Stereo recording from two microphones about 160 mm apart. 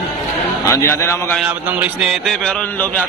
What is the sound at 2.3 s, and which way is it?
Speech, 5° left (ahead or behind).